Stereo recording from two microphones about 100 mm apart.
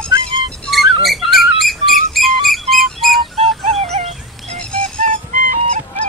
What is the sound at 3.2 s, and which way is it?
Bird, 80° right.